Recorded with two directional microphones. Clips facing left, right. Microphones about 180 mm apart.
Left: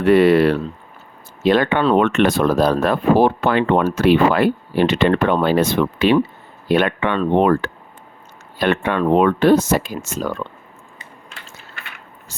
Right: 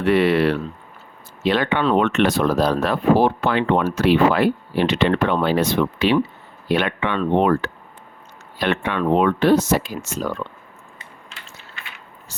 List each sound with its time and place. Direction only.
0.0 s speech: 45° left (ahead or behind)